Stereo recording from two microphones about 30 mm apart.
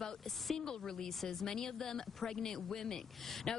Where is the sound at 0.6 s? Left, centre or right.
Left.